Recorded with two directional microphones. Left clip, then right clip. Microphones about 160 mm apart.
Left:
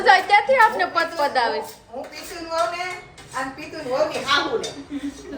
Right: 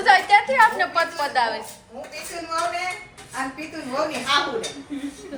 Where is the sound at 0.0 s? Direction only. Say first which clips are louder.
Left 1 dB; 25° left (ahead or behind).